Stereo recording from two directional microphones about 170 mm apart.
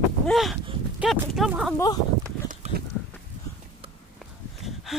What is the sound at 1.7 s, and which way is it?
Speech, 20° left (ahead or behind).